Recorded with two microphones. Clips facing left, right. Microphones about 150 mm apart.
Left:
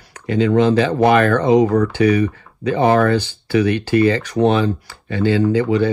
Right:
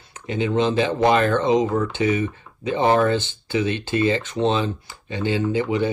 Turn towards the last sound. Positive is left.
turn(degrees=-15)  # may be behind; listen again after turning